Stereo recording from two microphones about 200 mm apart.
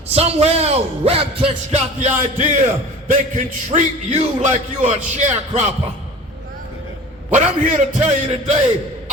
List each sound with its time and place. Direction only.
0.1 s a man's voice: 30° right (ahead or behind)
7.3 s a man's voice: 40° right (ahead or behind)